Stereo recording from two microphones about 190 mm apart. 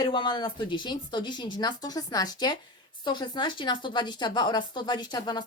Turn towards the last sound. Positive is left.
turn(degrees=20)  # may be behind; listen again after turning